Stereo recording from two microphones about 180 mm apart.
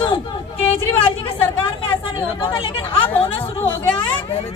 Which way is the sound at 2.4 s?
30° left (ahead or behind).